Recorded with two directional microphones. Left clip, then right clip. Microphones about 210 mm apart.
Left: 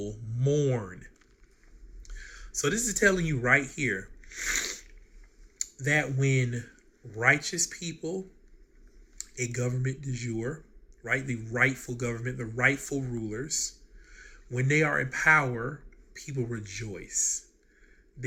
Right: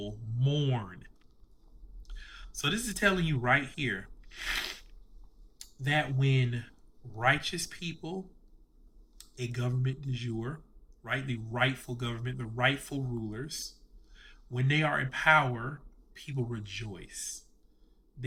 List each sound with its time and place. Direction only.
0.0 s speech: 15° right (ahead or behind)